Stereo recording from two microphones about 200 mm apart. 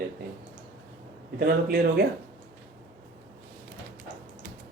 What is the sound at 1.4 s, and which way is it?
Speech, 50° right (ahead or behind).